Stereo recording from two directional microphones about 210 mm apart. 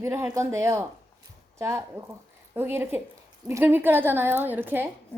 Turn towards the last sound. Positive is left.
turn(degrees=-10)  # may be behind; listen again after turning